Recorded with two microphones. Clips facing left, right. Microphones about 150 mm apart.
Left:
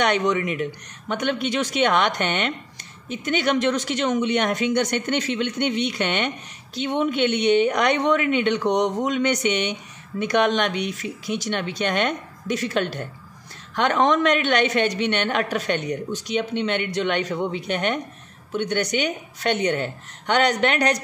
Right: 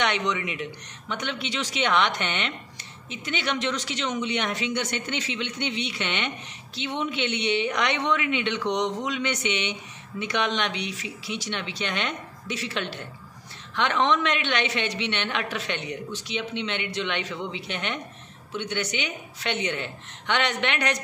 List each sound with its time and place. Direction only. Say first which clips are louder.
0.0 s speech: left 5 dB; 45° left (ahead or behind)